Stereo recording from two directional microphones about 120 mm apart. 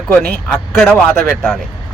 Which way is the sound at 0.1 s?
10° left (ahead or behind).